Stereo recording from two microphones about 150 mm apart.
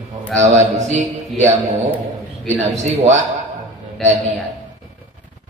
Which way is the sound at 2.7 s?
50° right (ahead or behind).